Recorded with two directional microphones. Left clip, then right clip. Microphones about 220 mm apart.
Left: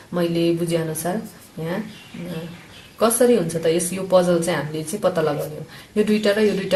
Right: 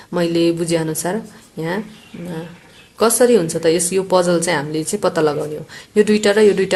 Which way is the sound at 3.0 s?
45° right (ahead or behind).